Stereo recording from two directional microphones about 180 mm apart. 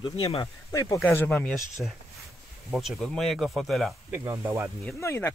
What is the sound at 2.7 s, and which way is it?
Speech, centre (ahead or behind).